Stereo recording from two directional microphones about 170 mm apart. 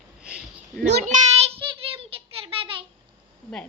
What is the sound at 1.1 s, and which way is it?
Child singing, 40° right (ahead or behind).